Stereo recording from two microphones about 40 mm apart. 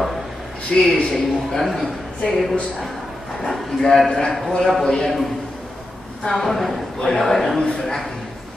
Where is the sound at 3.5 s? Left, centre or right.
Centre.